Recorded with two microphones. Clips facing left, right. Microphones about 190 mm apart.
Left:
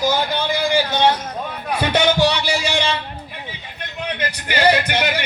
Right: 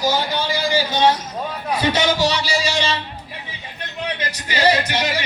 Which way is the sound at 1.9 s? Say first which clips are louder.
Left 4 dB; 55° left (ahead or behind).